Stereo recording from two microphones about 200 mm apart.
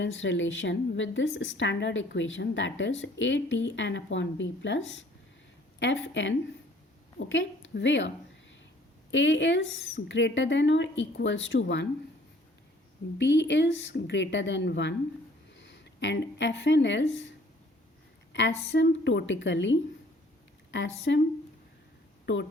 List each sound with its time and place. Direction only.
0.0 s a woman's voice: 70° left (ahead or behind)
5.8 s a woman's voice: 65° left (ahead or behind)
13.1 s speech: 60° left (ahead or behind)
18.7 s speech: 65° left (ahead or behind)